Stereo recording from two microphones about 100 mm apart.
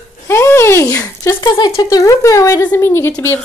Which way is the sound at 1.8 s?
35° left (ahead or behind).